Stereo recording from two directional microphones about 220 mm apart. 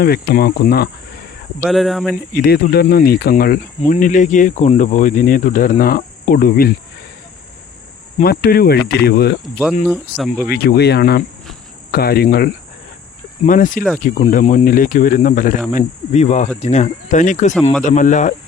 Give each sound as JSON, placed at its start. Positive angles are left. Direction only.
{"t": 0.0, "sound": "cricket", "side_deg": 45}
{"t": 1.6, "sound": "speech", "side_deg": 0}
{"t": 2.3, "sound": "cricket", "side_deg": 45}
{"t": 3.9, "sound": "speech", "side_deg": 35}
{"t": 8.2, "sound": "cricket", "side_deg": 45}
{"t": 9.4, "sound": "speech", "side_deg": 0}
{"t": 10.5, "sound": "cricket", "side_deg": 45}
{"t": 13.4, "sound": "speech", "side_deg": 35}